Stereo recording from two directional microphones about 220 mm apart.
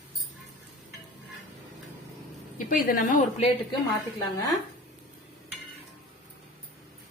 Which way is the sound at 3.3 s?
30° left (ahead or behind).